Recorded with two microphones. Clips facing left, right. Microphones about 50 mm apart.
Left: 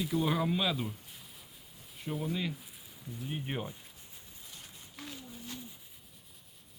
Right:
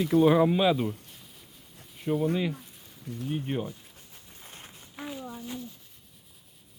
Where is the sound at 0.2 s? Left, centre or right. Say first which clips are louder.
Right 11 dB; centre.